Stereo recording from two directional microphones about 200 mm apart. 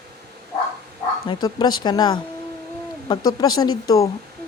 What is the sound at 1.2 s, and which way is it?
Speech, 25° left (ahead or behind).